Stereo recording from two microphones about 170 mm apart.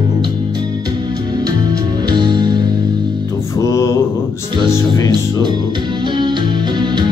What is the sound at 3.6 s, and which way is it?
Mantra, 20° left (ahead or behind).